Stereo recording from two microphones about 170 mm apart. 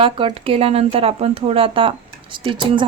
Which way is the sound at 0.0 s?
30° right (ahead or behind).